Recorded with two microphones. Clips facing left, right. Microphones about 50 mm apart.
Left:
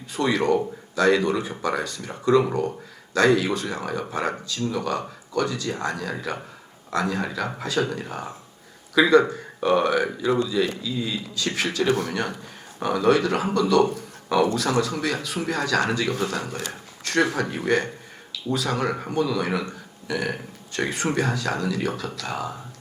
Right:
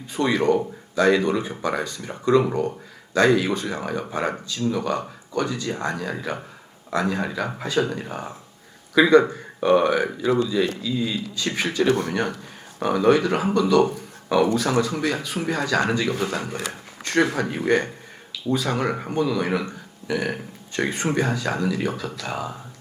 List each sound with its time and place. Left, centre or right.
0.1 s speech: centre
2.0 s speech: right
2.5 s speech: centre
13.8 s a sound: centre
14.5 s speech: centre
16.1 s speech: right
17.0 s a sound: centre
17.3 s speech: centre